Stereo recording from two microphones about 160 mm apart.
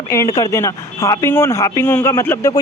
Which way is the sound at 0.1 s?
20° left (ahead or behind).